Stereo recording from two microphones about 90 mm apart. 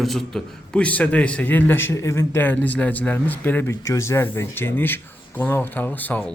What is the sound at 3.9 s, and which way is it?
Speech, 30° left (ahead or behind).